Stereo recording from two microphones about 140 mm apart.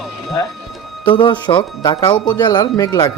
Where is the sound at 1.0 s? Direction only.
35° left (ahead or behind).